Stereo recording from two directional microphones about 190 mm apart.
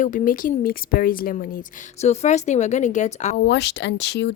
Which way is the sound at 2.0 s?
35° left (ahead or behind).